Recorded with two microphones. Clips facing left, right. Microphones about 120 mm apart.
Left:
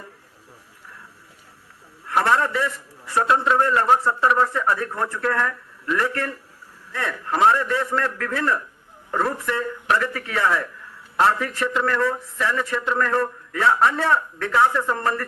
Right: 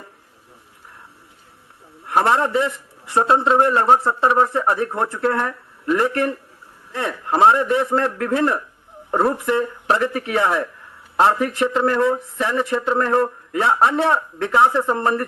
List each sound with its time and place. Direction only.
2.0 s a man's voice: 25° right (ahead or behind)